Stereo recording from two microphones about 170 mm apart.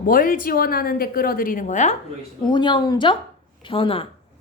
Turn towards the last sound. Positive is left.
turn(degrees=30)  # may be behind; listen again after turning